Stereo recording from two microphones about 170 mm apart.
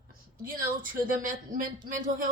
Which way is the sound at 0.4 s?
55° right (ahead or behind).